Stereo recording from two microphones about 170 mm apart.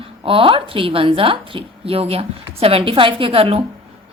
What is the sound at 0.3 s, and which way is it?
A woman's voice, 30° right (ahead or behind).